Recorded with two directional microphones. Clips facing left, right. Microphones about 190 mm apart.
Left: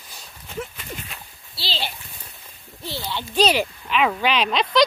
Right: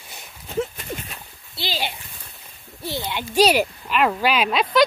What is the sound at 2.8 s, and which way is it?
Speech, 15° right (ahead or behind).